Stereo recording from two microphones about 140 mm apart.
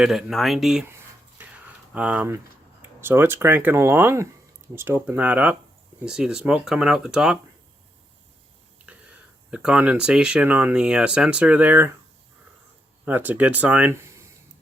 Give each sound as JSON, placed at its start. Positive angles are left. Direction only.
{"t": 0.0, "sound": "speech", "side_deg": 0}
{"t": 0.9, "sound": "a sound", "side_deg": -15}
{"t": 1.9, "sound": "speech", "side_deg": -10}
{"t": 9.5, "sound": "speech", "side_deg": -5}
{"t": 13.1, "sound": "speech", "side_deg": -15}